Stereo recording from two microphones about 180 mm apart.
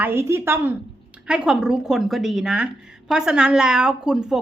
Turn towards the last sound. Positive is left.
turn(degrees=-5)  # may be behind; listen again after turning